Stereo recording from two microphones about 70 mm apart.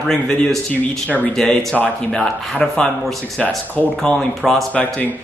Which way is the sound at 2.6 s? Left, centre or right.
Centre.